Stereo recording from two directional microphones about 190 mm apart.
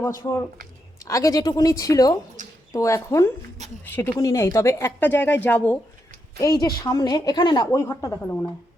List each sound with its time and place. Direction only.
0.2 s a woman's voice: 15° left (ahead or behind)
2.4 s a sound: 40° right (ahead or behind)
2.7 s a woman's voice: 15° left (ahead or behind)